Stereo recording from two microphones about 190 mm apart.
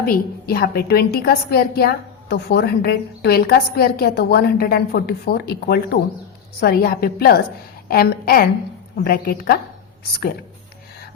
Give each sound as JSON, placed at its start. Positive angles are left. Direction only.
{"t": 0.0, "sound": "a woman's voice", "side_deg": 50}